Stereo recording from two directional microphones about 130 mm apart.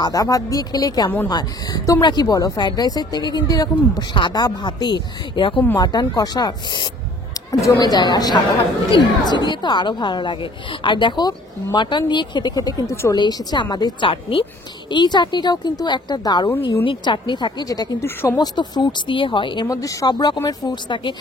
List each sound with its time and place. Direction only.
0.0 s speech: 25° left (ahead or behind)
18.0 s speech: 15° left (ahead or behind)
18.4 s speech: 35° left (ahead or behind)